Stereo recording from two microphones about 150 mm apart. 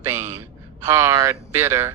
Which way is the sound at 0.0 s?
15° right (ahead or behind).